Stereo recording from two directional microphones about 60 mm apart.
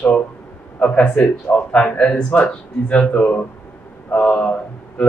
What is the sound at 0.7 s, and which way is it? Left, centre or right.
A man's voice, centre.